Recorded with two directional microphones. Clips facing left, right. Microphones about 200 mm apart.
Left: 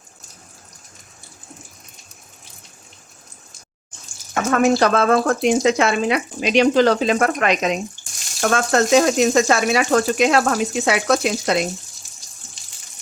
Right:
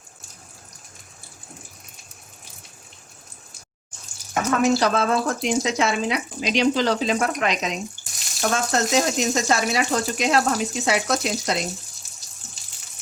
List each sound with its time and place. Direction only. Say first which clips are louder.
4.5 s speech: left 4 dB; 60° left (ahead or behind)